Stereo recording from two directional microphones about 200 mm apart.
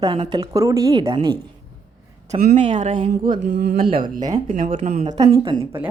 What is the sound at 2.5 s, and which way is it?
Speech, 35° right (ahead or behind).